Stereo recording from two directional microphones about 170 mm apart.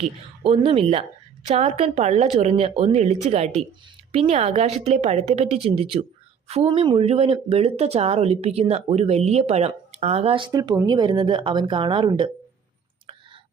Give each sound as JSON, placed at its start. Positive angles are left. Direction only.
{"t": 0.0, "sound": "speech", "side_deg": -35}